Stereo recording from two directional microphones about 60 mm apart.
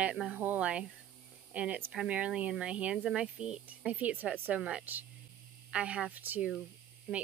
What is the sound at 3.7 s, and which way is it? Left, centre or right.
Speech, right.